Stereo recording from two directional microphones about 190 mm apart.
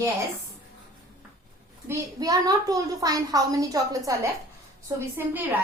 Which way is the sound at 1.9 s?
20° right (ahead or behind).